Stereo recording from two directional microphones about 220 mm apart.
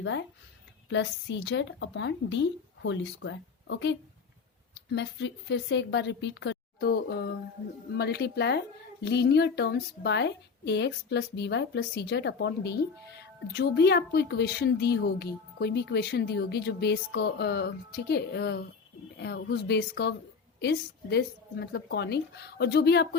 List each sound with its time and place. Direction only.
0.0 s a woman's voice: 55° left (ahead or behind)